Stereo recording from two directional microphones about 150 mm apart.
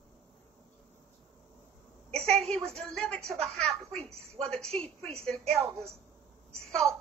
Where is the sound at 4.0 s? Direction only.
40° right (ahead or behind).